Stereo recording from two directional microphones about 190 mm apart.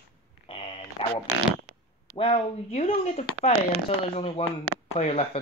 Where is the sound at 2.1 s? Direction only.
30° left (ahead or behind).